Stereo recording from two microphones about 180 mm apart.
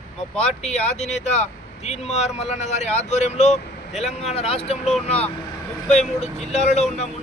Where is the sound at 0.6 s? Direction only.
40° left (ahead or behind).